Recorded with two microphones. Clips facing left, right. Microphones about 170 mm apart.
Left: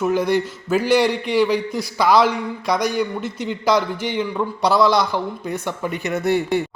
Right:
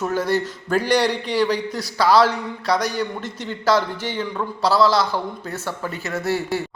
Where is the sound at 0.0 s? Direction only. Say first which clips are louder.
Left 3 dB; 15° left (ahead or behind).